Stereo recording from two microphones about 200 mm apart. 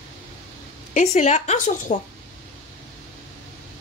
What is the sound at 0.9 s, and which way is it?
Speech, 35° left (ahead or behind).